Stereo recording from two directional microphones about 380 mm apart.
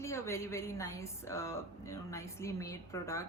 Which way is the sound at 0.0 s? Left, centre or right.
Centre.